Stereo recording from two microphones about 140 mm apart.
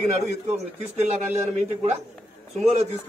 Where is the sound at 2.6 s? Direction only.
45° right (ahead or behind).